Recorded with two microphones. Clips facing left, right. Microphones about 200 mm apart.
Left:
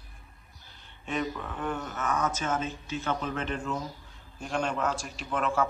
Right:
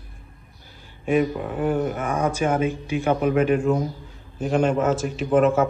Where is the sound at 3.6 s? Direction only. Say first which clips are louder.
Right 12 dB; 55° right (ahead or behind).